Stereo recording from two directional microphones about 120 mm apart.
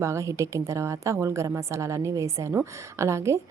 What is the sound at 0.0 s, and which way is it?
A woman's voice, 25° right (ahead or behind).